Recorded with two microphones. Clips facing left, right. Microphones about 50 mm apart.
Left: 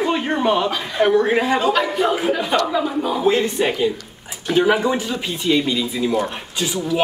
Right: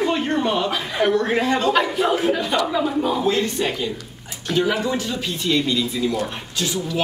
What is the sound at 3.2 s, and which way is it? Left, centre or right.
Speech, centre.